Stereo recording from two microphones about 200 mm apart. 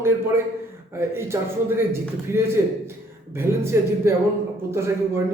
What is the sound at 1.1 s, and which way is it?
Speech, 10° right (ahead or behind).